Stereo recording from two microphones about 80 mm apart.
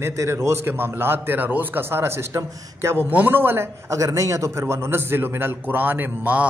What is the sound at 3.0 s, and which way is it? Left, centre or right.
Speech, right.